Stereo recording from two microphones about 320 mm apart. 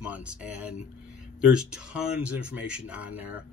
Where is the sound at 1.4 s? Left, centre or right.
Centre.